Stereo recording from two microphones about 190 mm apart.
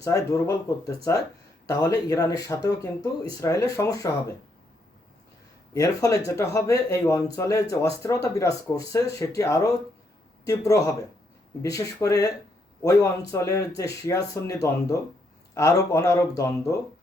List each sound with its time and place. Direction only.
0.0 s speech: 15° left (ahead or behind)
5.7 s speech: 15° left (ahead or behind)